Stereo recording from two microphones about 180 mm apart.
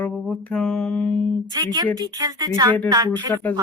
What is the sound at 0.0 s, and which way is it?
Mantra, 10° left (ahead or behind).